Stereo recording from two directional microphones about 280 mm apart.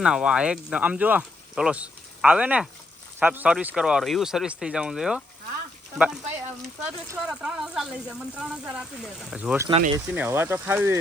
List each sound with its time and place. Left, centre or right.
0.0 s speech: centre
7.1 s speech: centre
9.6 s speech: centre
10.1 s speech: centre